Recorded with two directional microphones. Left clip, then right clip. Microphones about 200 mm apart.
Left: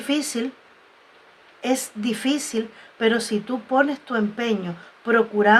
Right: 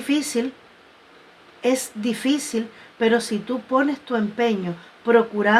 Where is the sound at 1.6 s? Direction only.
30° left (ahead or behind).